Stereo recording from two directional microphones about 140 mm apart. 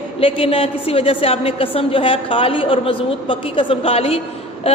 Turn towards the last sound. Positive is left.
turn(degrees=45)  # may be behind; listen again after turning